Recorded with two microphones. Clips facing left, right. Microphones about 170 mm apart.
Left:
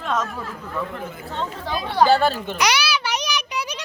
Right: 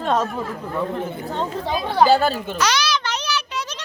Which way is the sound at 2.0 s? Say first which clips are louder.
Even; centre (ahead or behind).